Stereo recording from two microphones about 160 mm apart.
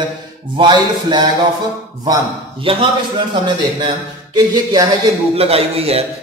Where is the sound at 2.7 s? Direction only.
35° right (ahead or behind).